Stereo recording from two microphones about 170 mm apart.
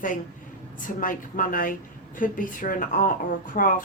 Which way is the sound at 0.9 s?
55° left (ahead or behind).